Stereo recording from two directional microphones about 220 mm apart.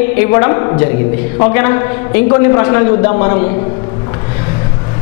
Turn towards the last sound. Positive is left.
turn(degrees=15)  # may be behind; listen again after turning